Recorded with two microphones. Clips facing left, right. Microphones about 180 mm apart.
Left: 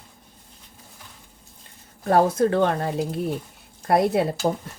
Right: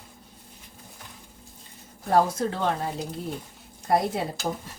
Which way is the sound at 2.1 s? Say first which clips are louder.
Left 4 dB; 60° left (ahead or behind).